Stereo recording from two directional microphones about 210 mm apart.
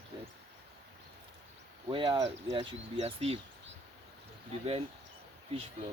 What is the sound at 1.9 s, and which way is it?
Speech, 25° right (ahead or behind).